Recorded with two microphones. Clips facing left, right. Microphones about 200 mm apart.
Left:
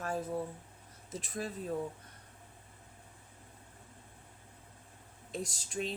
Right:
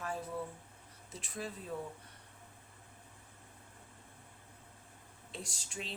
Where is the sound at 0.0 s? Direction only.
40° left (ahead or behind).